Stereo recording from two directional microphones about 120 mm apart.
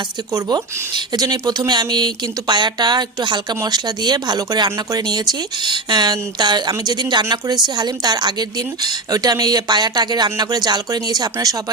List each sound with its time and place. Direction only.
0.3 s speech: 35° right (ahead or behind)